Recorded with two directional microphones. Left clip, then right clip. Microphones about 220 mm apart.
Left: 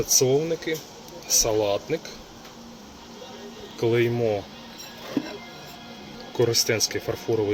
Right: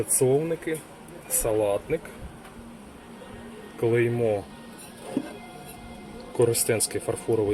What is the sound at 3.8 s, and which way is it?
Speech, 5° left (ahead or behind).